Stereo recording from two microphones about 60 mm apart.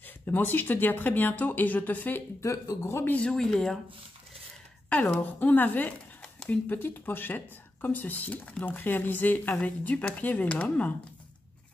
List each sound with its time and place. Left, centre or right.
0.2 s speech: left
2.4 s speech: left
2.8 s a man's voice: left
3.2 s speech: centre
5.2 s speech: left